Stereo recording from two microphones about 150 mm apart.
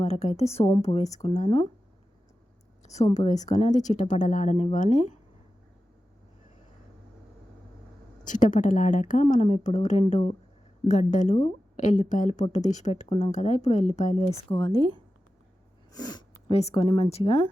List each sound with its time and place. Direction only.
0.0 s a woman's voice: 45° left (ahead or behind)
1.2 s a woman's voice: 50° left (ahead or behind)
3.2 s a woman's voice: 50° left (ahead or behind)
8.2 s a woman's voice: 60° left (ahead or behind); by 14.8 s 40° left (ahead or behind)
15.9 s speech: 25° left (ahead or behind)
16.5 s a woman's voice: 40° left (ahead or behind)